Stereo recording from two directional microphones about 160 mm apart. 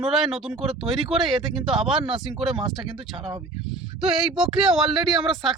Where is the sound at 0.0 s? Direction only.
Centre (ahead or behind).